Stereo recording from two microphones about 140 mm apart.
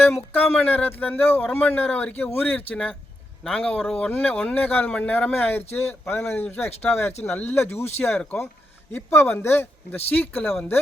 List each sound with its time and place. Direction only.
0.3 s a man's voice: 15° left (ahead or behind)